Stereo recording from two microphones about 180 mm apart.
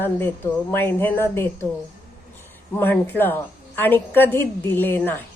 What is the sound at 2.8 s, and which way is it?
A woman's voice, 10° left (ahead or behind).